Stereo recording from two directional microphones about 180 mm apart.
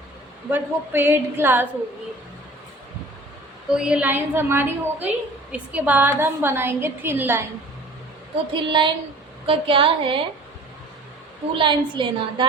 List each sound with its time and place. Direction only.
0.5 s a woman's voice: 10° right (ahead or behind)
3.7 s a woman's voice: 5° right (ahead or behind)
8.5 s a woman's voice: 25° right (ahead or behind)
11.5 s a woman's voice: 25° right (ahead or behind)